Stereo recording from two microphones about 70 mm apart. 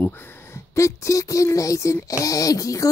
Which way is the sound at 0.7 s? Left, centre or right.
Left.